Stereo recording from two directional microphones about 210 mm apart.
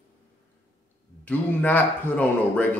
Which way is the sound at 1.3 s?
10° left (ahead or behind).